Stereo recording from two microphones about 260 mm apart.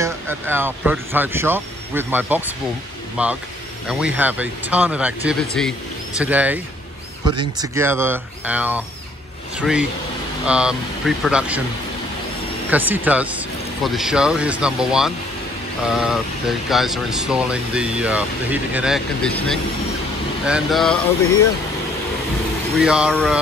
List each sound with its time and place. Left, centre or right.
0.0 s speech: centre
12.7 s speech: centre
22.8 s speech: centre